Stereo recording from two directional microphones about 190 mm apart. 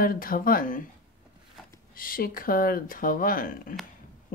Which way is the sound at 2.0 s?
50° left (ahead or behind).